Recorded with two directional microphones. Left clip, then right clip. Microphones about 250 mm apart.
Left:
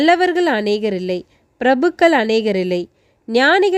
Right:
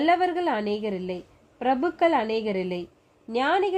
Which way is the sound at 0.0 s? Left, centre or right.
Left.